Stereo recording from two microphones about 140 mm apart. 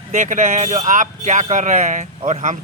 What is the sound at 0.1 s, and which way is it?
Speech, 60° right (ahead or behind).